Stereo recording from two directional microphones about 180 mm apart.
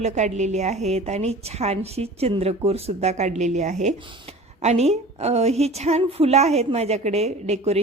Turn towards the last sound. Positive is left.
turn(degrees=-35)  # may be behind; listen again after turning